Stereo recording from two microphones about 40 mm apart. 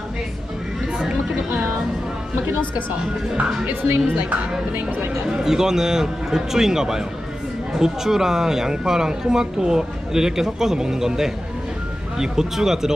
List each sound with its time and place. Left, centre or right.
2.5 s speech: right
3.7 s a woman's voice: right
5.3 s speech: centre